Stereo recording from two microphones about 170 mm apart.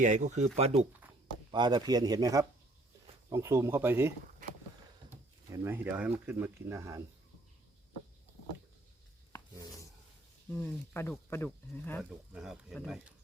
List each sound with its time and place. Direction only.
0.0 s speech: 45° right (ahead or behind)
1.5 s speech: 25° right (ahead or behind)
4.4 s vehicle: 50° right (ahead or behind)
5.5 s speech: 10° right (ahead or behind)
10.6 s speech: 15° left (ahead or behind)
12.3 s speech: centre (ahead or behind)